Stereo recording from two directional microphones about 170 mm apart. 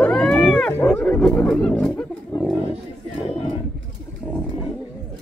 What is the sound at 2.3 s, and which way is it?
Bird, 10° left (ahead or behind).